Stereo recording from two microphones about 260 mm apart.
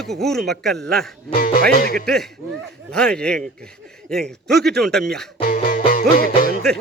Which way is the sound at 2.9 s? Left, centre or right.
Centre.